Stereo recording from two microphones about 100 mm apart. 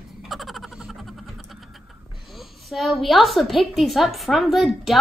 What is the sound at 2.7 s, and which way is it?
A woman's voice, centre (ahead or behind).